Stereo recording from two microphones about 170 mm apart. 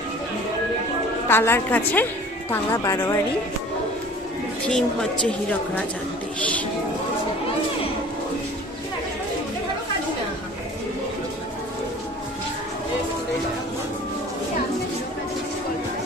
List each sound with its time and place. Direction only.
1.3 s a woman's voice: 15° left (ahead or behind)
4.7 s a woman's voice: 5° left (ahead or behind)